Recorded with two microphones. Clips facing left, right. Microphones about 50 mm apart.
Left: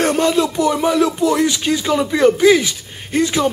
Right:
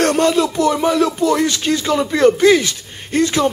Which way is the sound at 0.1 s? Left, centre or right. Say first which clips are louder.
Right 1 dB; centre.